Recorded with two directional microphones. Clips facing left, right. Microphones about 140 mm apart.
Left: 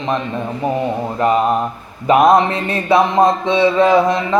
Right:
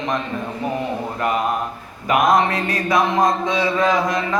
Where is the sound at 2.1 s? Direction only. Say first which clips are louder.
Left 5 dB; 25° left (ahead or behind).